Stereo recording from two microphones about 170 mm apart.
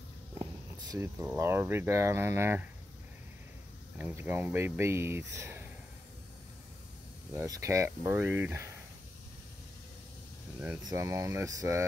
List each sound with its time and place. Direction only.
0.3 s a sound: 20° right (ahead or behind)
1.0 s speech: 15° right (ahead or behind)
4.0 s speech: 15° right (ahead or behind)
7.3 s speech: 20° right (ahead or behind)
10.9 s speech: 20° right (ahead or behind)